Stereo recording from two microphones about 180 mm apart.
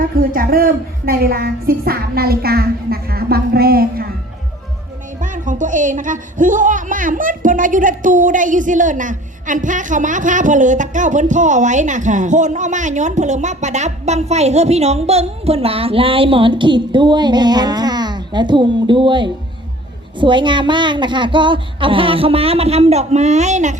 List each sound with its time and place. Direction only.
0.0 s a woman's voice: 50° right (ahead or behind)
5.2 s speech: 45° right (ahead or behind)